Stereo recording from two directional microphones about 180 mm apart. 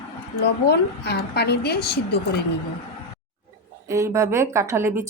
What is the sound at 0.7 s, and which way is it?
A woman's voice, 65° left (ahead or behind).